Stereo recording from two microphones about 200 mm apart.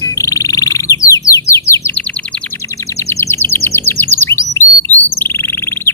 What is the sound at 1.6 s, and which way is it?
Bird, 15° left (ahead or behind).